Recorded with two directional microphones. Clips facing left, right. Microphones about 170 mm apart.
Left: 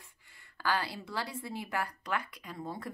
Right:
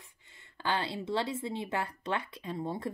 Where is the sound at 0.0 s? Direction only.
20° right (ahead or behind).